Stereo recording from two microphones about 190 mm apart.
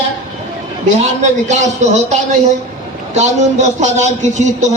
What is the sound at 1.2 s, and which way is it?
Speech, 40° right (ahead or behind).